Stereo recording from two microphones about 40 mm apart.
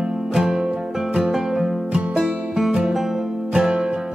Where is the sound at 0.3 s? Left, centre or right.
Centre.